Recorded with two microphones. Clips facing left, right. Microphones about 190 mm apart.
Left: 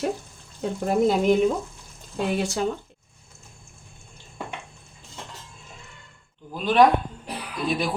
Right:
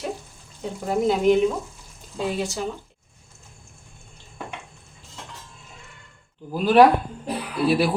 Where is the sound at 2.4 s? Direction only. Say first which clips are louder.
Left 2 dB; 60° left (ahead or behind).